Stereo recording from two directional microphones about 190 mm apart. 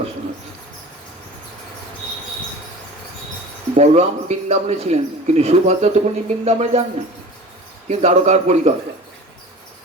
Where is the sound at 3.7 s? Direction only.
35° right (ahead or behind).